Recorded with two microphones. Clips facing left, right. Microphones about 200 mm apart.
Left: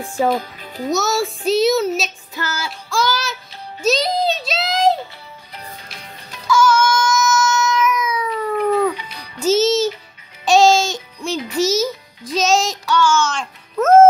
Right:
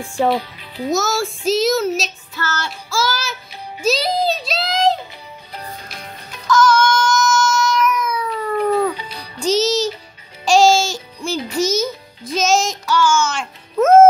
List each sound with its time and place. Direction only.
0.3 s speech: 45° left (ahead or behind)
0.8 s a child's voice: centre (ahead or behind)
2.3 s child singing: 10° left (ahead or behind)
2.9 s a child's voice: centre (ahead or behind)
5.5 s music: 45° right (ahead or behind)
6.4 s a sound: 10° left (ahead or behind)
8.9 s music: 30° right (ahead or behind)
9.4 s music: 5° left (ahead or behind)
11.5 s a child's voice: centre (ahead or behind)
12.4 s music: centre (ahead or behind)